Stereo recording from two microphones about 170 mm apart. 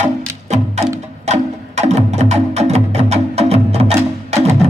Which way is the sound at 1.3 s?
40° right (ahead or behind).